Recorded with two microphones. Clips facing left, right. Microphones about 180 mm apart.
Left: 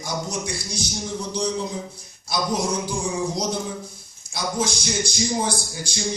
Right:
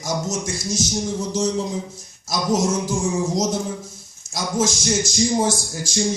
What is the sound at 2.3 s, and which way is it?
Speech, 45° right (ahead or behind).